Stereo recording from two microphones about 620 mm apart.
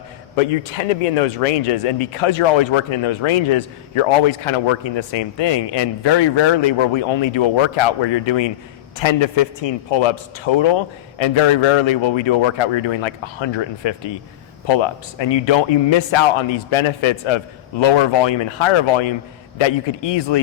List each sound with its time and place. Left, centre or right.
0.3 s speech: left